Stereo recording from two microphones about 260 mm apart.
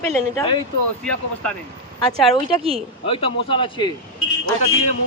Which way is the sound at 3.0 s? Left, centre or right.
Centre.